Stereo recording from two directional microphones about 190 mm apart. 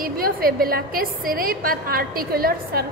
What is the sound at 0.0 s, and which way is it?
A woman's voice, 50° right (ahead or behind).